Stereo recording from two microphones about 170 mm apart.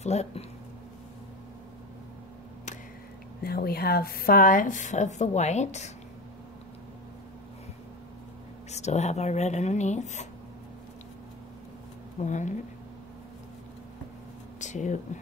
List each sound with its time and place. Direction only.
0.0 s speech: 40° left (ahead or behind)
3.4 s a woman's voice: 65° left (ahead or behind); by 5.9 s 40° left (ahead or behind)
8.7 s a woman's voice: 40° left (ahead or behind)
12.2 s a woman's voice: 45° left (ahead or behind)
14.6 s a sound: 45° left (ahead or behind)